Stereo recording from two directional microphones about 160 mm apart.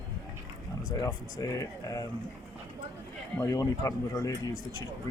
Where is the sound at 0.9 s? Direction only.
20° left (ahead or behind).